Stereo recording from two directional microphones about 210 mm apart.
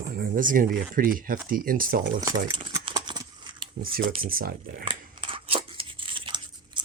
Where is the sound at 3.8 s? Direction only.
40° right (ahead or behind).